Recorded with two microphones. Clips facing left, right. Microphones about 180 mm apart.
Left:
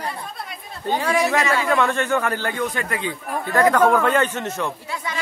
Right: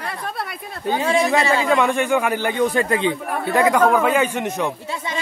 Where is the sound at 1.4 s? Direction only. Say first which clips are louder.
Right 2 dB; 30° right (ahead or behind).